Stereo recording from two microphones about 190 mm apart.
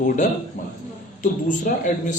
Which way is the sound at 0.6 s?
40° left (ahead or behind).